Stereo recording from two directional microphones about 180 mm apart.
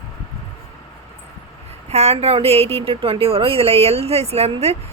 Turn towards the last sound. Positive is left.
turn(degrees=-35)  # may be behind; listen again after turning